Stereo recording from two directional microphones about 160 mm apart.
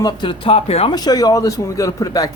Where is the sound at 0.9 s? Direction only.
25° left (ahead or behind).